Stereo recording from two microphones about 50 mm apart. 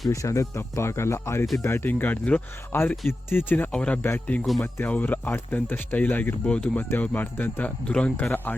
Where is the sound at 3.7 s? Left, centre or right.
Left.